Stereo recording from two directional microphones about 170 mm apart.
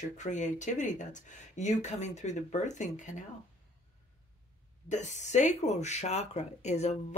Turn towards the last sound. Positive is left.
turn(degrees=40)  # may be behind; listen again after turning